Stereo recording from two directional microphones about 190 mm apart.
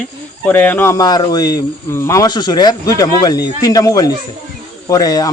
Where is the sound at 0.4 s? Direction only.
10° left (ahead or behind).